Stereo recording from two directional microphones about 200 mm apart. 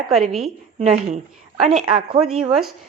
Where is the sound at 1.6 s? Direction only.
35° right (ahead or behind).